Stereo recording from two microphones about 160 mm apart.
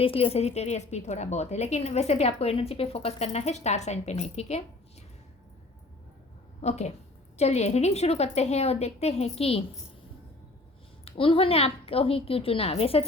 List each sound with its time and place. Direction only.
0.0 s a woman's voice: 35° left (ahead or behind)
6.6 s a woman's voice: 45° left (ahead or behind)
11.0 s a woman's voice: 35° left (ahead or behind)